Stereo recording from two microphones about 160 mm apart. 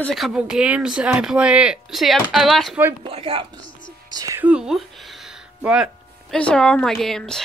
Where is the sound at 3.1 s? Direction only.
35° right (ahead or behind).